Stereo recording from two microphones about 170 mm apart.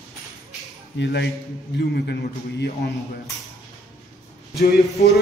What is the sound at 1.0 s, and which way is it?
Speech, 85° left.